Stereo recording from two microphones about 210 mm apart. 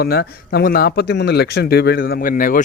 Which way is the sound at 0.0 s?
50° left (ahead or behind).